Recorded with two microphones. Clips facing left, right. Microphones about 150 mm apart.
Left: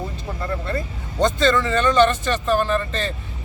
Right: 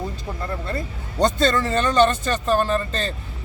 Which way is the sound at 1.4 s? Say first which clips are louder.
Left 1 dB; 40° right (ahead or behind).